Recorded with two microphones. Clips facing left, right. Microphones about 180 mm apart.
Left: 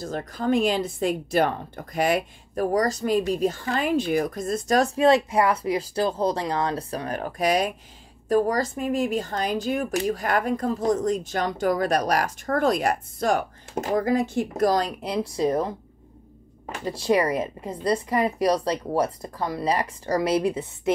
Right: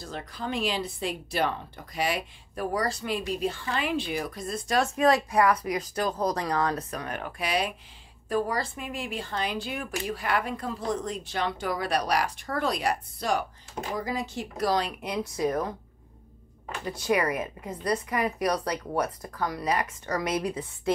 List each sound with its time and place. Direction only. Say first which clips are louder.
0.0 s speech: left 8 dB; 45° left (ahead or behind); by 15.7 s 30° left (ahead or behind)
16.8 s speech: left 4 dB; 30° left (ahead or behind)